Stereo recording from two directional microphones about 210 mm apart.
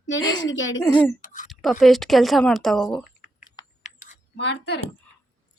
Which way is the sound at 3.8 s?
35° left (ahead or behind).